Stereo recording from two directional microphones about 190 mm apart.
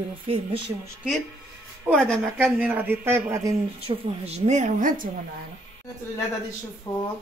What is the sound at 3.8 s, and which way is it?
Speech, 30° right (ahead or behind).